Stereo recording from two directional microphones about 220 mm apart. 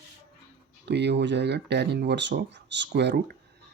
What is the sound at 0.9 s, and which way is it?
Speech, 50° right (ahead or behind).